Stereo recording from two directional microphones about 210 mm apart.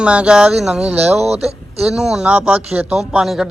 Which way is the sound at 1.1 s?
30° right (ahead or behind).